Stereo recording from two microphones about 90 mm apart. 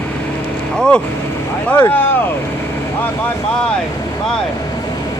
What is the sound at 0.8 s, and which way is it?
Vehicle, 10° left (ahead or behind).